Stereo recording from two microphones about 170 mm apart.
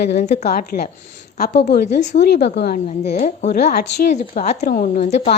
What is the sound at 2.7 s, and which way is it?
Speech, 40° left (ahead or behind).